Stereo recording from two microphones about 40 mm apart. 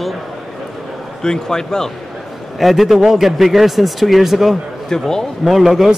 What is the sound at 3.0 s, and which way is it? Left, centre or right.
Speech, centre.